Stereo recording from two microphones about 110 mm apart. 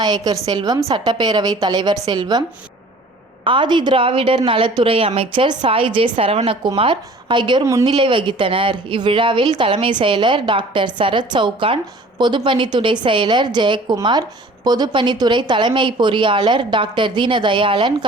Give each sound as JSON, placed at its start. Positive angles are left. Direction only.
{"t": 0.0, "sound": "a woman's voice", "side_deg": -40}
{"t": 3.4, "sound": "a woman's voice", "side_deg": -50}
{"t": 6.7, "sound": "a woman's voice", "side_deg": -50}
{"t": 7.6, "sound": "speech", "side_deg": -30}
{"t": 7.9, "sound": "a woman's voice", "side_deg": -50}